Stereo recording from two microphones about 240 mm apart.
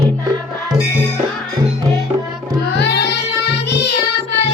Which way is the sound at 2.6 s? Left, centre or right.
Left.